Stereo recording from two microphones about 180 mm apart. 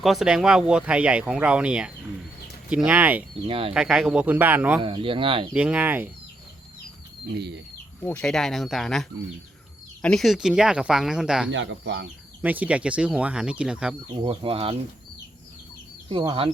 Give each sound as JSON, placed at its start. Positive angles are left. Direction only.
{"t": 0.0, "sound": "speech", "side_deg": 0}
{"t": 3.4, "sound": "speech", "side_deg": -30}
{"t": 3.8, "sound": "speech", "side_deg": -5}
{"t": 4.8, "sound": "speech", "side_deg": -30}
{"t": 5.5, "sound": "speech", "side_deg": -10}
{"t": 7.3, "sound": "speech", "side_deg": -70}
{"t": 8.0, "sound": "speech", "side_deg": 5}
{"t": 11.5, "sound": "speech", "side_deg": -90}
{"t": 12.4, "sound": "speech", "side_deg": -10}
{"t": 14.2, "sound": "speech", "side_deg": -30}
{"t": 16.0, "sound": "speech", "side_deg": -30}